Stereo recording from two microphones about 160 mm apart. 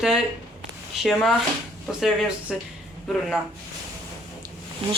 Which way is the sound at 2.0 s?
Centre (ahead or behind).